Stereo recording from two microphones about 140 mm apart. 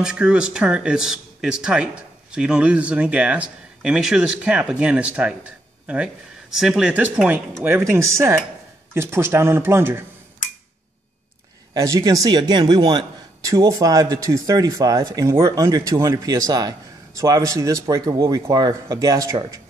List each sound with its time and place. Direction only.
0.0 s speech: 5° right (ahead or behind)
11.7 s speech: 25° right (ahead or behind)